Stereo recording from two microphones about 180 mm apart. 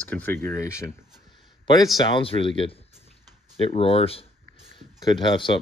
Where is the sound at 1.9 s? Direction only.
30° left (ahead or behind).